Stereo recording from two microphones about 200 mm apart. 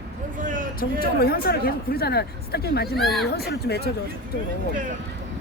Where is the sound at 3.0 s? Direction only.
Centre (ahead or behind).